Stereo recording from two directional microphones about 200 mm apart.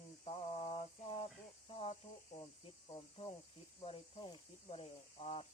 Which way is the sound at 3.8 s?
25° left (ahead or behind).